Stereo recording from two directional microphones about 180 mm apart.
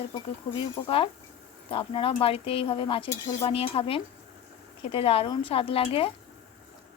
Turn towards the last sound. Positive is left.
turn(degrees=30)  # may be behind; listen again after turning